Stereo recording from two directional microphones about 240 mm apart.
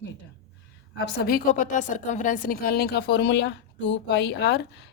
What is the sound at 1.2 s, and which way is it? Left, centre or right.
A woman's voice, left.